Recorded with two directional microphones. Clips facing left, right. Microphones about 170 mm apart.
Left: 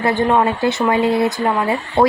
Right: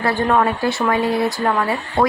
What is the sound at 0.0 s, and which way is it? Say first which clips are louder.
Speech: left 2 dB; 20° left (ahead or behind).